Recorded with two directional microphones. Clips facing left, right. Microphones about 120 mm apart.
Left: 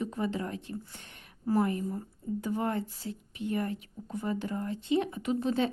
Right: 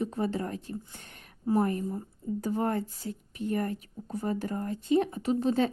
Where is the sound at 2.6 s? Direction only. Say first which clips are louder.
Right 2 dB; 40° right (ahead or behind).